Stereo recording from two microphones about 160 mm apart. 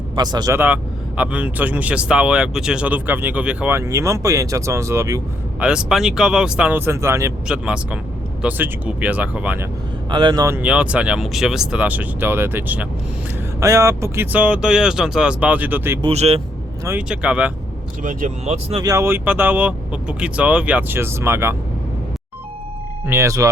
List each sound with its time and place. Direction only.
0.2 s speech: 25° right (ahead or behind)
0.5 s speech: 10° right (ahead or behind)
3.8 s speech: 20° right (ahead or behind)
5.5 s speech: 5° right (ahead or behind)
7.4 s speech: 5° right (ahead or behind)
10.1 s speech: 30° right (ahead or behind)
10.4 s speech: 10° right (ahead or behind)
16.0 s speech: 40° right (ahead or behind)
17.1 s speech: 10° right (ahead or behind)
18.0 s speech: 55° right (ahead or behind)
18.8 s speech: 20° right (ahead or behind)
23.0 s speech: 15° right (ahead or behind)